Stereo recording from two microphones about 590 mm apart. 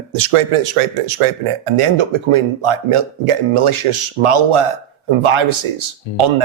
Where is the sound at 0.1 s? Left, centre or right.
Right.